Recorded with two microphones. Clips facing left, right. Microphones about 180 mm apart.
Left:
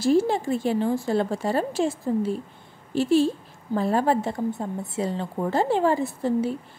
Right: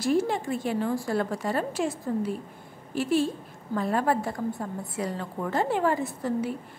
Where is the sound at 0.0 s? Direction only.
30° left (ahead or behind).